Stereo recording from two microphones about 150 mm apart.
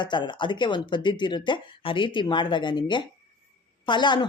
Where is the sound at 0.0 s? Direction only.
30° left (ahead or behind).